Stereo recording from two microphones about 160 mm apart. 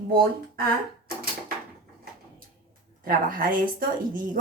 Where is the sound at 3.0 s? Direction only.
60° right (ahead or behind).